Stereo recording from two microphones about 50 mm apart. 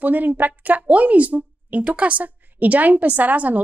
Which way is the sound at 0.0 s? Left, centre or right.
Right.